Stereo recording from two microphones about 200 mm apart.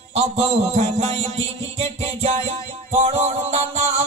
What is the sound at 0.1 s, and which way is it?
Music, 30° right (ahead or behind).